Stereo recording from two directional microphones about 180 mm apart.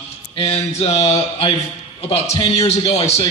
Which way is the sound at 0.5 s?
35° left (ahead or behind).